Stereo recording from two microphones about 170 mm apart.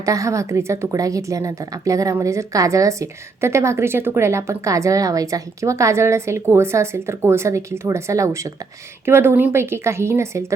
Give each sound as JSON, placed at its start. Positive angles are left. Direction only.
{"t": 0.0, "sound": "a woman's voice", "side_deg": -20}